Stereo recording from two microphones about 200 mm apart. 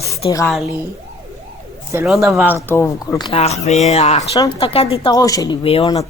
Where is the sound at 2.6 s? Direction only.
10° left (ahead or behind).